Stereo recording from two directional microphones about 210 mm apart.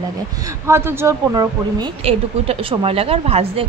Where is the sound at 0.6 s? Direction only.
10° right (ahead or behind); by 3.7 s 30° right (ahead or behind).